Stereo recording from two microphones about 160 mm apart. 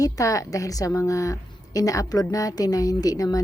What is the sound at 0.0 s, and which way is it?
A woman's voice, 20° left (ahead or behind).